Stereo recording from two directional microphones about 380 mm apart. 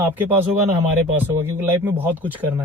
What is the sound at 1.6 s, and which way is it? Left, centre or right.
Speech, centre.